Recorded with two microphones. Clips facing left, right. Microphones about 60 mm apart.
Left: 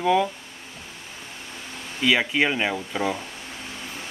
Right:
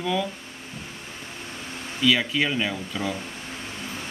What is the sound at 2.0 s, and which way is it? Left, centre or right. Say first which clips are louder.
Speech: left 1 dB; left.